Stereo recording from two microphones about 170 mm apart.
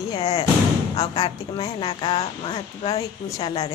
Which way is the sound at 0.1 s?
35° left (ahead or behind).